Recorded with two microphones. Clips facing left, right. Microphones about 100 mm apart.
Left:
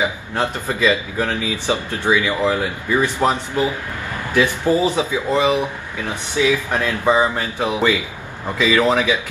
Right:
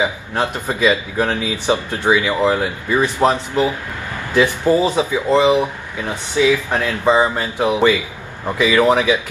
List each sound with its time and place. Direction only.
0.0 s speech: 15° right (ahead or behind)
6.8 s speech: 20° right (ahead or behind)